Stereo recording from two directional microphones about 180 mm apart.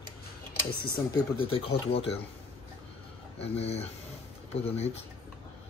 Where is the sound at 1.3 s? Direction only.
30° left (ahead or behind).